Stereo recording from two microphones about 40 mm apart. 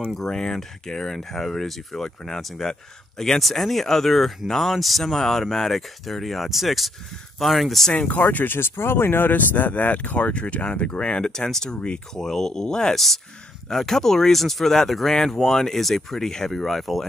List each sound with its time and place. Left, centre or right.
0.1 s speech: centre
7.9 s speech: left
8.5 s speech: left; by 12.9 s centre
12.9 s speech: centre